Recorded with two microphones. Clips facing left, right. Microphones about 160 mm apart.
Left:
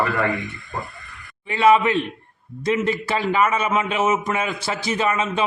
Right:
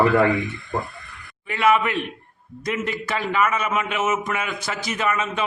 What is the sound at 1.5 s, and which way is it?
A man's voice, 30° left (ahead or behind).